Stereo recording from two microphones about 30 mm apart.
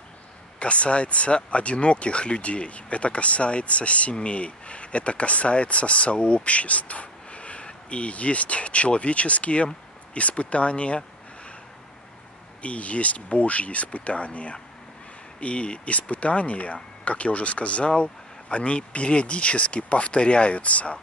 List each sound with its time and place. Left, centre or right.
0.6 s speech: left
12.6 s speech: left